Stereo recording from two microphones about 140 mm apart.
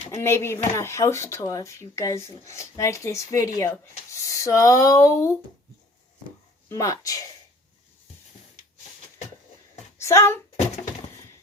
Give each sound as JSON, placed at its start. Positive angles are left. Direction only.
{"t": 0.1, "sound": "speech", "side_deg": 20}
{"t": 6.7, "sound": "speech", "side_deg": 25}
{"t": 10.0, "sound": "speech", "side_deg": 20}